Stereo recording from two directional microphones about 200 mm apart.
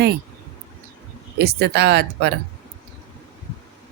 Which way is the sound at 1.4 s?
55° right (ahead or behind).